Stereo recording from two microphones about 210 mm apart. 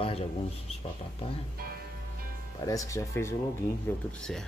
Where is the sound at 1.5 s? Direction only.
45° right (ahead or behind).